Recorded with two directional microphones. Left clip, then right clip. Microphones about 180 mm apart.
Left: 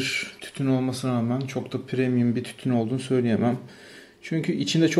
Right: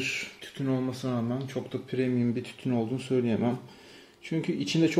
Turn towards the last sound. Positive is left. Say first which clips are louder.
# left 4 dB
turn(degrees=10)  # may be behind; listen again after turning